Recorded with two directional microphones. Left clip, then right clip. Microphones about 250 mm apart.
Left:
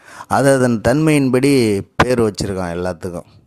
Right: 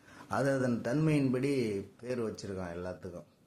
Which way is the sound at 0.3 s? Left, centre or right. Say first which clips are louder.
Left 18 dB; left.